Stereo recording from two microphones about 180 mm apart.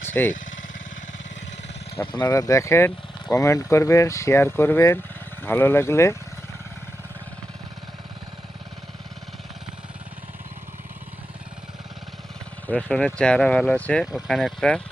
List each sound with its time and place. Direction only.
0.0 s a sound: 10° left (ahead or behind)
2.0 s speech: 15° left (ahead or behind)
12.6 s speech: 5° left (ahead or behind)